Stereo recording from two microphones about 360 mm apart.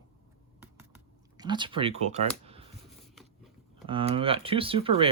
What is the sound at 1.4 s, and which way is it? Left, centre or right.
Speech, centre.